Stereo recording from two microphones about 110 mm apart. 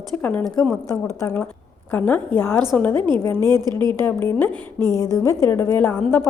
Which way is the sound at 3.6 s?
40° right (ahead or behind).